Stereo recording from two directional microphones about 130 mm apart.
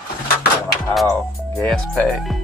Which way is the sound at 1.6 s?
5° left (ahead or behind).